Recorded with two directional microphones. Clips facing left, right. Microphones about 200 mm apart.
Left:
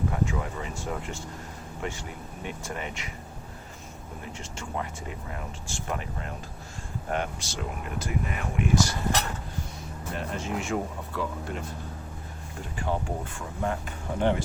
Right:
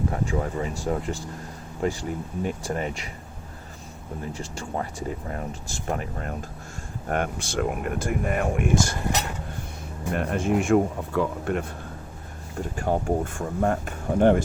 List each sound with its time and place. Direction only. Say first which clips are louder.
0.1 s speech: right 3 dB; 40° right (ahead or behind)
4.4 s speech: right 2 dB; 35° right (ahead or behind); by 9.0 s 50° right (ahead or behind)
10.1 s speech: right 8 dB; 55° right (ahead or behind)
12.7 s speech: right 6 dB; 45° right (ahead or behind)